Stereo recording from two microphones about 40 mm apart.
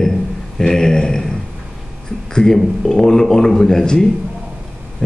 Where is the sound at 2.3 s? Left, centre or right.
Centre.